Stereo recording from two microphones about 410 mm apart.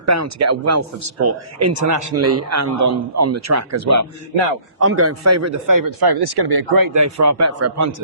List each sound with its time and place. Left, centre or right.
0.0 s speech: right